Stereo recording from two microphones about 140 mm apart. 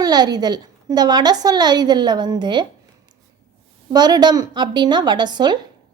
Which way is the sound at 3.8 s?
30° right (ahead or behind).